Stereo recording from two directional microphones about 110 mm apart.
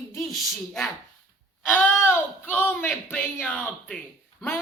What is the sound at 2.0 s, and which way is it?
Speech, 20° left (ahead or behind).